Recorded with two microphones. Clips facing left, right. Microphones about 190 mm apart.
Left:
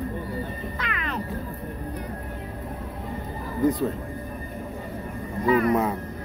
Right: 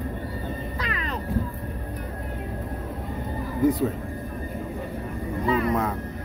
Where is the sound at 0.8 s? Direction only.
35° right (ahead or behind).